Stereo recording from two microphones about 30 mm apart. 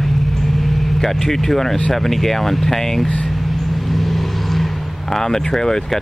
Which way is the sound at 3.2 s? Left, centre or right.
Centre.